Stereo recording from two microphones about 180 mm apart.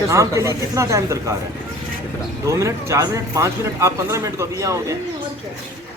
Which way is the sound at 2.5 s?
15° right (ahead or behind).